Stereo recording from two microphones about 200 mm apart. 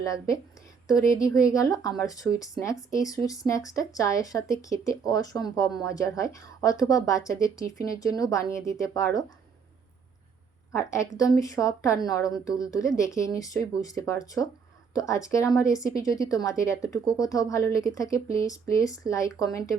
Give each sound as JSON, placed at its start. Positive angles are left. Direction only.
{"t": 0.0, "sound": "speech", "side_deg": 15}
{"t": 11.2, "sound": "speech", "side_deg": 15}